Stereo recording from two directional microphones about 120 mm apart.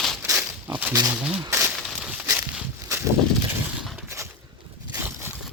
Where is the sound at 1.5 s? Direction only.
20° right (ahead or behind).